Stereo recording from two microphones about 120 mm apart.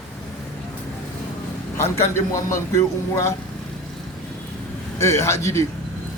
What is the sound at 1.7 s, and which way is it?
Speech, 25° left (ahead or behind).